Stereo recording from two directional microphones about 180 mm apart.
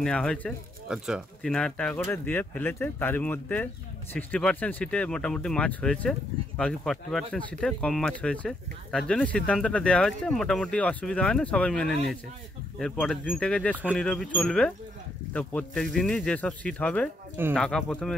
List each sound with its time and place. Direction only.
0.0 s speech: 5° left (ahead or behind)